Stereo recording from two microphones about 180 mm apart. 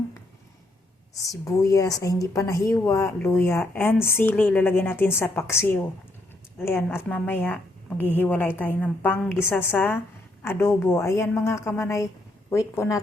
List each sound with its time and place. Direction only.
1.1 s a woman's voice: 20° left (ahead or behind)